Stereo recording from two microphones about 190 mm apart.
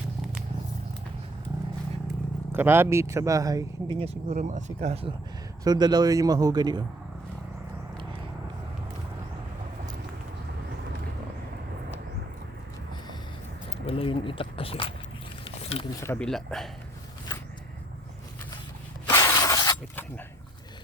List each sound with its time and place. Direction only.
2.5 s speech: 10° right (ahead or behind)
4.0 s speech: 35° right (ahead or behind)
5.6 s a man's voice: 20° right (ahead or behind)
13.8 s speech: 30° left (ahead or behind)
15.4 s a sound: 30° left (ahead or behind)
16.0 s speech: 10° left (ahead or behind)
19.0 s a sound: 20° left (ahead or behind)